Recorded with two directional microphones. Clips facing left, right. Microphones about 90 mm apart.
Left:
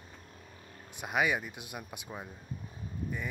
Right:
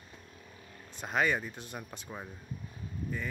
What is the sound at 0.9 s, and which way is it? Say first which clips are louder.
Speech: even; 10° left (ahead or behind).